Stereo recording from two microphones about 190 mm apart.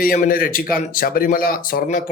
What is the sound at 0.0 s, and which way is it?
Speech, 50° left (ahead or behind).